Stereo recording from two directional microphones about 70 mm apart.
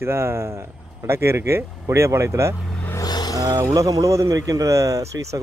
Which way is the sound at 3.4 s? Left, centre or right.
Right.